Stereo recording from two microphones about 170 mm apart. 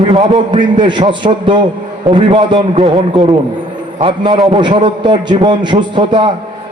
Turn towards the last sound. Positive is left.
turn(degrees=-30)  # may be behind; listen again after turning